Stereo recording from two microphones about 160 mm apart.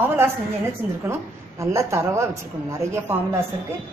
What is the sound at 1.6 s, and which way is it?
A woman's voice, 20° right (ahead or behind).